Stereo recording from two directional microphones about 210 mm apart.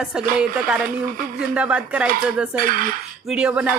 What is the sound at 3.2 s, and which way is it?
Speech, 5° right (ahead or behind).